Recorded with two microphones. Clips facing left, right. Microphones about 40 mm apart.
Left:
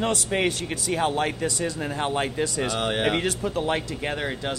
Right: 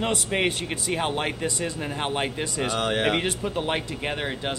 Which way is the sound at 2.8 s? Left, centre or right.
Centre.